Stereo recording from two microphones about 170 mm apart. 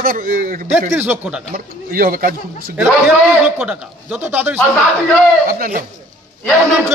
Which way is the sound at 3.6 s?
10° right (ahead or behind).